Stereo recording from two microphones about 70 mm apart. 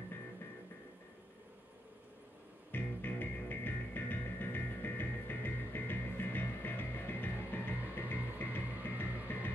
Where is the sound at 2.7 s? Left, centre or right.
Left.